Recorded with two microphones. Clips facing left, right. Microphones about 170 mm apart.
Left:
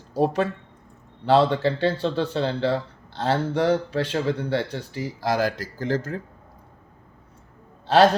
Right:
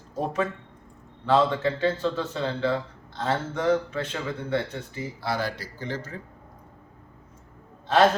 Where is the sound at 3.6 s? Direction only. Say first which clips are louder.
Even; 75° left (ahead or behind).